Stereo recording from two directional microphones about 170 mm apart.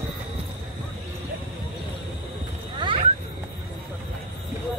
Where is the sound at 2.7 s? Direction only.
30° right (ahead or behind).